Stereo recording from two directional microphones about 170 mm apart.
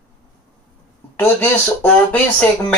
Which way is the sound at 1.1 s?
10° left (ahead or behind).